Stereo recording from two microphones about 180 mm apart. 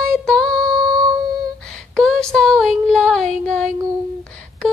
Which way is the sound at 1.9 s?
5° left (ahead or behind).